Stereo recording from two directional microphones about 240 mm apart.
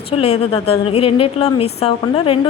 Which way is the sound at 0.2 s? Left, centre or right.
Left.